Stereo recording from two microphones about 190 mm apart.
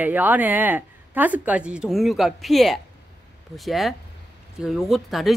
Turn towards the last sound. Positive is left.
turn(degrees=0)  # may be behind; listen again after turning